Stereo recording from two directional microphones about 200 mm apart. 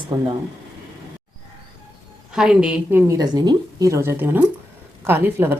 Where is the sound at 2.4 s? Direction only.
5° right (ahead or behind).